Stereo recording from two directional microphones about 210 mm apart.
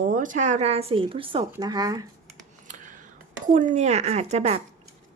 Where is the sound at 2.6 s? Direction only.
35° right (ahead or behind).